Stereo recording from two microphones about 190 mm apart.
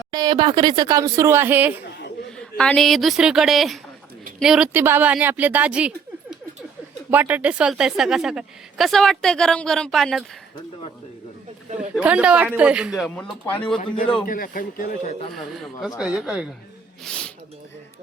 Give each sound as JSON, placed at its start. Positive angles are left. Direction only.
{"t": 0.1, "sound": "speech", "side_deg": -20}
{"t": 2.4, "sound": "speech", "side_deg": 5}
{"t": 7.1, "sound": "speech", "side_deg": -10}
{"t": 11.9, "sound": "speech", "side_deg": -5}
{"t": 14.3, "sound": "a man's voice", "side_deg": 50}
{"t": 15.3, "sound": "speech", "side_deg": 0}
{"t": 17.0, "sound": "speech", "side_deg": 5}